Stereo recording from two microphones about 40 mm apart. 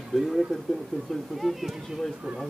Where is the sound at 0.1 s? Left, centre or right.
Centre.